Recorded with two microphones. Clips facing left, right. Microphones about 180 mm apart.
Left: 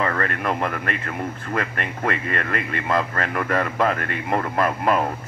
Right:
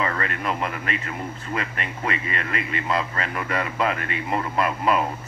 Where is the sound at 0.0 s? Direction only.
45° left (ahead or behind).